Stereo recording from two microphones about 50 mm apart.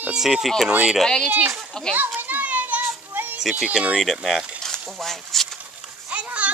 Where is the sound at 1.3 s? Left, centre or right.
Right.